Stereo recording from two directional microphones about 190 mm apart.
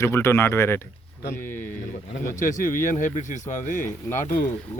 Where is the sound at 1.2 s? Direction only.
50° left (ahead or behind).